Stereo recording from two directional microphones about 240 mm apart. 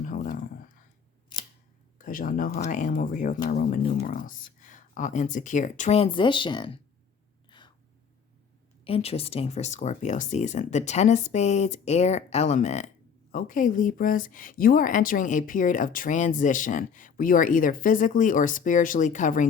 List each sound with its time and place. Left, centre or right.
0.0 s a sound: left
2.0 s a woman's voice: left; by 6.7 s centre
7.5 s gasp: centre
8.8 s a woman's voice: left